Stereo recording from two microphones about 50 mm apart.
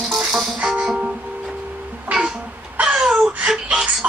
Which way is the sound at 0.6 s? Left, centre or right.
Right.